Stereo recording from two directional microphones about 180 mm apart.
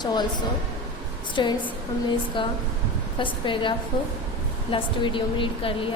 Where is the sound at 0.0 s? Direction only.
25° left (ahead or behind).